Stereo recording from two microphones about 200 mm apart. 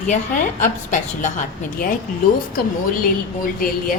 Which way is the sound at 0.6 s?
40° left (ahead or behind).